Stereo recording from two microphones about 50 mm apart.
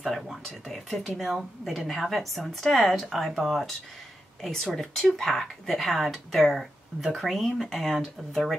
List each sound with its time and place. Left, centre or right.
0.0 s a woman's voice: centre